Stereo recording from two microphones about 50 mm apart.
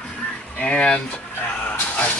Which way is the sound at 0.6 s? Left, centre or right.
Left.